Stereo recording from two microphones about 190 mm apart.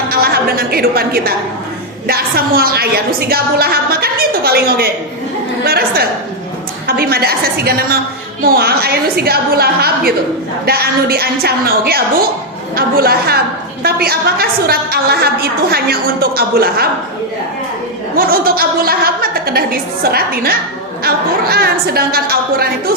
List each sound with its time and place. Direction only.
0.1 s a woman's voice: 55° right (ahead or behind)
18.2 s a woman's voice: 50° right (ahead or behind)